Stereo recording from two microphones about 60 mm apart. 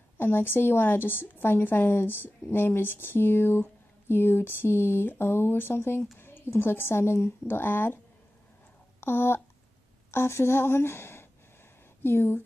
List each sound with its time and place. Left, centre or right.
0.2 s a woman's voice: left
9.0 s a woman's voice: left